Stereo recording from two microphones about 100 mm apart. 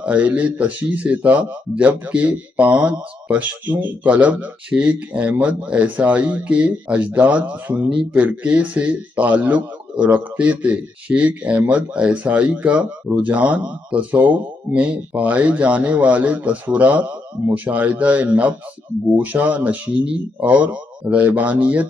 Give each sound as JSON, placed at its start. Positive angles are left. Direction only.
{"t": 0.0, "sound": "speech", "side_deg": -15}